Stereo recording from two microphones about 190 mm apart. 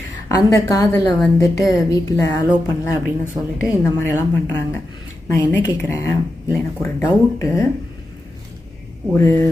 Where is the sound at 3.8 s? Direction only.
15° left (ahead or behind).